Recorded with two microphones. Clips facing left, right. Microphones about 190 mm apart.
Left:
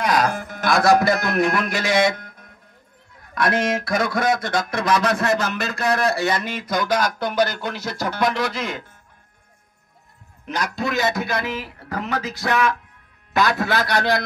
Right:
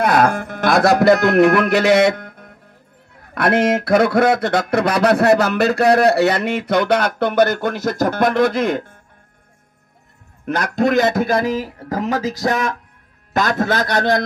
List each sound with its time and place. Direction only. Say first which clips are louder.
0.0 s speech: right 5 dB; 55° right (ahead or behind)
10.4 s a man's voice: right 8 dB; 50° right (ahead or behind)